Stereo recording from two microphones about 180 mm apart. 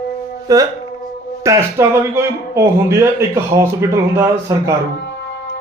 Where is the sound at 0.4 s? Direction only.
20° right (ahead or behind).